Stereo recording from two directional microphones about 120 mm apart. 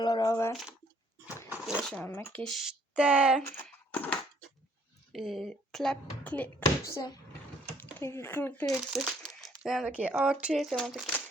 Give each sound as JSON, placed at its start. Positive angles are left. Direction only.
{"t": 0.0, "sound": "speech", "side_deg": 35}
{"t": 1.5, "sound": "dog", "side_deg": -10}
{"t": 1.8, "sound": "a child's voice", "side_deg": 5}
{"t": 2.0, "sound": "speech", "side_deg": 15}
{"t": 2.4, "sound": "a child's voice", "side_deg": 0}
{"t": 3.9, "sound": "a sound", "side_deg": 10}
{"t": 5.1, "sound": "a child's voice", "side_deg": 0}
{"t": 6.8, "sound": "speech", "side_deg": 30}
{"t": 7.8, "sound": "speech", "side_deg": 20}
{"t": 8.6, "sound": "a child's voice", "side_deg": 0}